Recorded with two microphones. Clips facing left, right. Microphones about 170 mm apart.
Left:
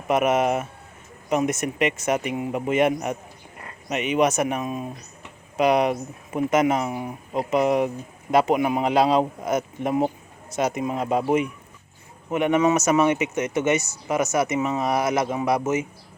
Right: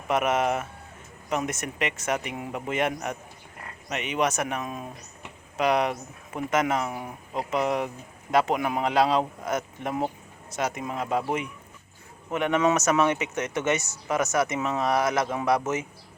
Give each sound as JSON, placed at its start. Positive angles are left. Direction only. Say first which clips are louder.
{"t": 0.1, "sound": "speech", "louder": "left 4 dB", "side_deg": 15}